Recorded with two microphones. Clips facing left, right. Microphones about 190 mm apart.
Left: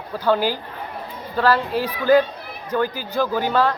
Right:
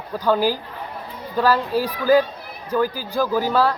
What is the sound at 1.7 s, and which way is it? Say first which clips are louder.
Speech: even; 10° right (ahead or behind).